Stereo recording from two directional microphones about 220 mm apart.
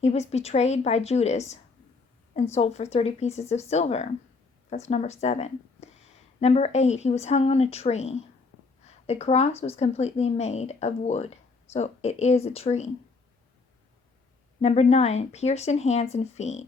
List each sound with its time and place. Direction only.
0.0 s speech: 30° left (ahead or behind)
8.8 s a sound: 30° left (ahead or behind)
9.6 s speech: 30° left (ahead or behind)
14.6 s speech: 30° left (ahead or behind)